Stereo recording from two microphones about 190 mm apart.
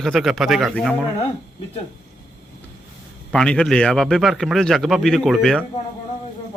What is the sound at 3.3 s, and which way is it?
A man's voice, 5° left (ahead or behind).